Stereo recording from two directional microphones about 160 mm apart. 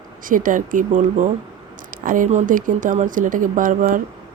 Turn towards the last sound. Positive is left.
turn(degrees=-55)  # may be behind; listen again after turning